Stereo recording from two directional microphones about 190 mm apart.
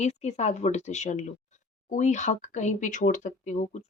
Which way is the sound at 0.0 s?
35° left (ahead or behind).